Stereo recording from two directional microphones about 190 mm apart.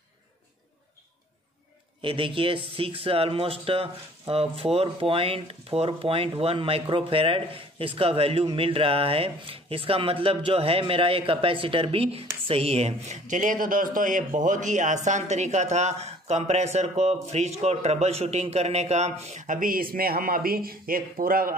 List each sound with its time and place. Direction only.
2.0 s speech: 25° right (ahead or behind); by 21.5 s 50° right (ahead or behind)